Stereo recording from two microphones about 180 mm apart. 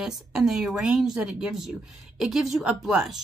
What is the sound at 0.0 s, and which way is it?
Speech, 5° right (ahead or behind).